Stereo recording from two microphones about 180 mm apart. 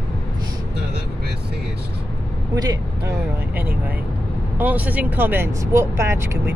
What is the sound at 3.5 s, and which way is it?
Speech, 10° right (ahead or behind).